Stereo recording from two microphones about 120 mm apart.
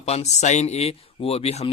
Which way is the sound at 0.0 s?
70° left (ahead or behind).